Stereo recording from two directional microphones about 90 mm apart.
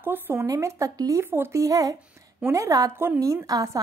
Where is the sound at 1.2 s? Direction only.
25° right (ahead or behind).